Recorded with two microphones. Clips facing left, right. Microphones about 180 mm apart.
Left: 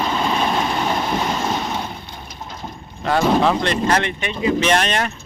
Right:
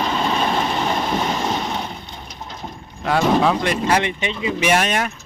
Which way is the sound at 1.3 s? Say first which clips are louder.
Even; 5° left (ahead or behind).